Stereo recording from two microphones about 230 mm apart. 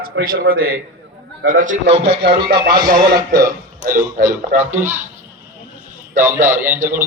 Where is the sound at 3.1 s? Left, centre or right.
Centre.